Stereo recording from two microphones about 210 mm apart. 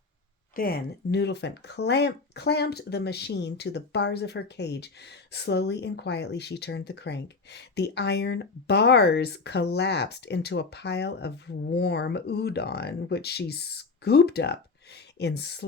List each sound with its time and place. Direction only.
0.5 s speech: 45° left (ahead or behind)